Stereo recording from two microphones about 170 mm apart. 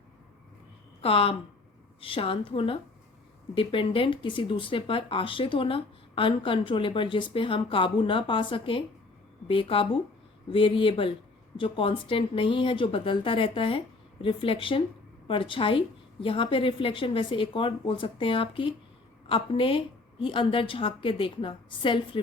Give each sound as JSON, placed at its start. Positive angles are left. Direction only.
{"t": 1.0, "sound": "speech", "side_deg": 30}